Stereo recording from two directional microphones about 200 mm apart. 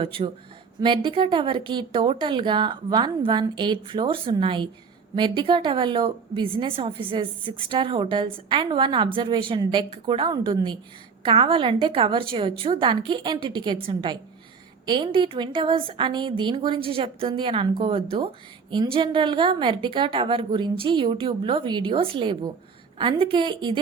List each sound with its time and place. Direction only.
0.0 s a woman's voice: 25° right (ahead or behind)